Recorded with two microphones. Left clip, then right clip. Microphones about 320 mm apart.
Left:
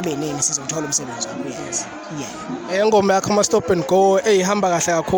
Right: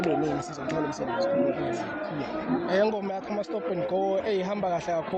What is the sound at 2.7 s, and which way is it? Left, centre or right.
Speech, left.